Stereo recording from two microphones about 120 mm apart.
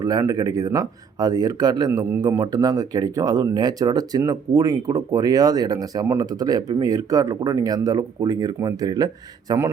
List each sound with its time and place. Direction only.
0.0 s speech: 30° right (ahead or behind)